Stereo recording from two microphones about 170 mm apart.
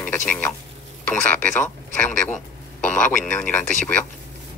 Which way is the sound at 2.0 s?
5° left (ahead or behind).